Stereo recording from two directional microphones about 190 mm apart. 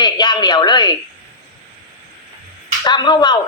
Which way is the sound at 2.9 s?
20° left (ahead or behind).